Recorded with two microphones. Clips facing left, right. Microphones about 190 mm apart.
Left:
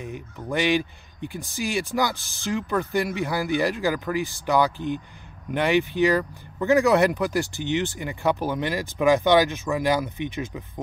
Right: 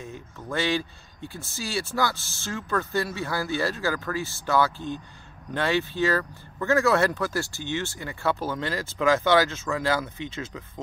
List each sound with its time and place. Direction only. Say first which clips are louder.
0.0 s speech: left 4 dB; 15° left (ahead or behind)